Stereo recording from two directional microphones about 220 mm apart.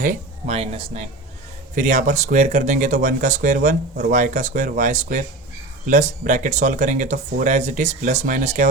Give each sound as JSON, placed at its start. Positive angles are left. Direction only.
{"t": 0.0, "sound": "speech", "side_deg": -35}